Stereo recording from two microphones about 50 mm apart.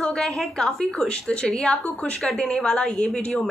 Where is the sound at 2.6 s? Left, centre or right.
Centre.